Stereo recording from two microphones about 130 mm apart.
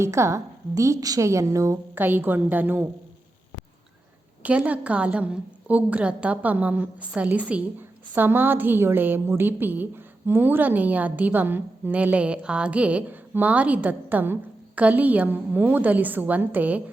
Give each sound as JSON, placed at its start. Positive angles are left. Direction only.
{"t": 0.0, "sound": "a woman's voice", "side_deg": -20}
{"t": 4.4, "sound": "a woman's voice", "side_deg": -10}